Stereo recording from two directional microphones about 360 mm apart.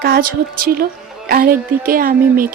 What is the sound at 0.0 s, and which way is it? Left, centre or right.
A woman's voice, right.